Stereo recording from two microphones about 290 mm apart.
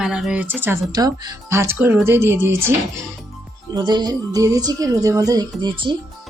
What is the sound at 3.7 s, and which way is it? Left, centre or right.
Speech, centre.